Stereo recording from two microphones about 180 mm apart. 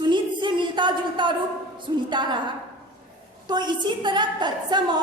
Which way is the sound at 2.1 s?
25° right (ahead or behind).